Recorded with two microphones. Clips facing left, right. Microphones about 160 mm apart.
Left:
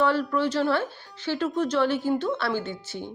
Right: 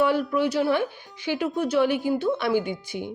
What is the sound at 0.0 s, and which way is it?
Speech, 10° right (ahead or behind).